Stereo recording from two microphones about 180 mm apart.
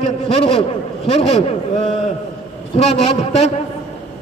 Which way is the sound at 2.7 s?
35° left (ahead or behind).